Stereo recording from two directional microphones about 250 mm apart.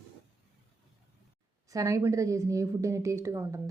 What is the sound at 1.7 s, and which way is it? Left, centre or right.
Speech, centre.